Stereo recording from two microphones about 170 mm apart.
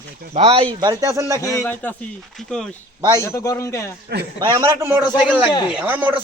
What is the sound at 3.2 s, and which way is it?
Speech, 20° left (ahead or behind).